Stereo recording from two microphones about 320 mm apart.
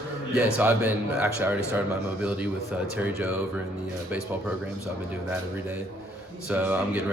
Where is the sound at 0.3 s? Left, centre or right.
Centre.